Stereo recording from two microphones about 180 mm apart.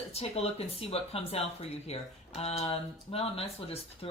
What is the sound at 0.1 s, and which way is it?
Speech, 35° left (ahead or behind).